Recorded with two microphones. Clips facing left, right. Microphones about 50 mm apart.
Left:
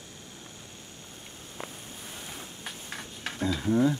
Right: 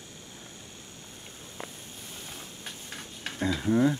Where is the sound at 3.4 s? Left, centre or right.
Centre.